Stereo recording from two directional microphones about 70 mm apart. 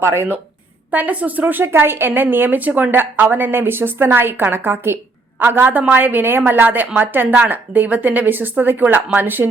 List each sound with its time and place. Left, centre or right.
0.0 s speech: right
0.9 s a woman's voice: right